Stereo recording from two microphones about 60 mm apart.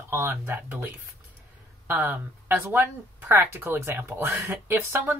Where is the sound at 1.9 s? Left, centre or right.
Right.